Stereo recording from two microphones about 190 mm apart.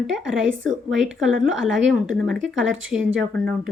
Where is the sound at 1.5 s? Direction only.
80° right.